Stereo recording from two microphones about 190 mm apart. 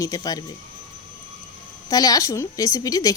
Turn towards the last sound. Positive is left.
turn(degrees=20)  # may be behind; listen again after turning